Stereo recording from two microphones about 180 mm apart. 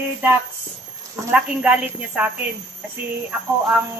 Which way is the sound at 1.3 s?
10° right (ahead or behind).